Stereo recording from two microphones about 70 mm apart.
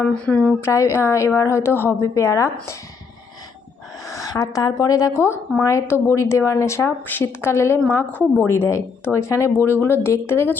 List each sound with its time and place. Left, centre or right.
0.1 s speech: centre
0.6 s speech: left
2.0 s speech: left
4.0 s speech: left
8.1 s a woman's voice: left
8.4 s speech: left